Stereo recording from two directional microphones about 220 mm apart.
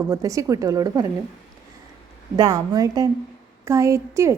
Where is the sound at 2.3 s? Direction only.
15° right (ahead or behind).